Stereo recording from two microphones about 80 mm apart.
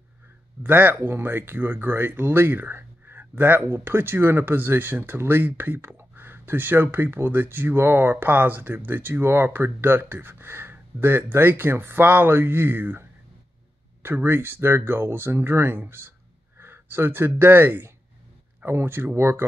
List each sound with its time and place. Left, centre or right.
0.7 s speech: right